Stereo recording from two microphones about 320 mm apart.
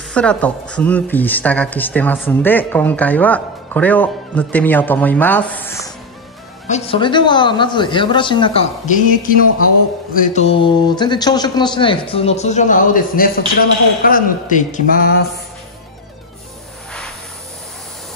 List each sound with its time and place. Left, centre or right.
0.1 s a man's voice: centre; by 15.4 s left